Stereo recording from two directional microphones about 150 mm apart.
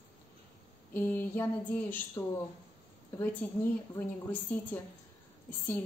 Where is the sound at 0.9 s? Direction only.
15° left (ahead or behind).